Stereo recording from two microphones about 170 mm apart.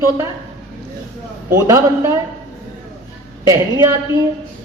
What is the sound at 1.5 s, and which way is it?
Speech, 20° right (ahead or behind).